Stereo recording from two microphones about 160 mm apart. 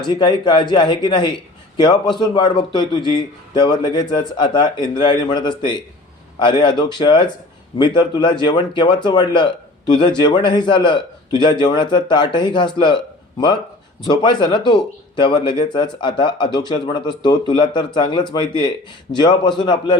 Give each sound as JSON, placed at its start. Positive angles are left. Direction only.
{"t": 0.1, "sound": "a man's voice", "side_deg": 25}
{"t": 14.1, "sound": "a man's voice", "side_deg": 30}